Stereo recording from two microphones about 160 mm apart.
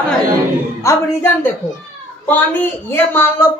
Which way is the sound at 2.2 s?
10° left (ahead or behind).